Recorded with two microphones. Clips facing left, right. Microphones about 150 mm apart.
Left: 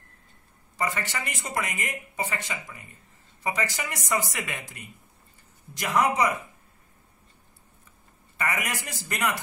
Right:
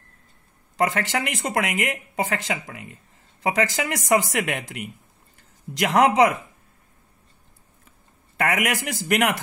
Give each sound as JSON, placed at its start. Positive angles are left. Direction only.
{"t": 0.7, "sound": "speech", "side_deg": -90}
{"t": 8.4, "sound": "speech", "side_deg": -90}